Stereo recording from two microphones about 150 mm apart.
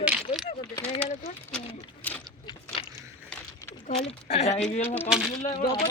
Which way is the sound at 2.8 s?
35° left (ahead or behind).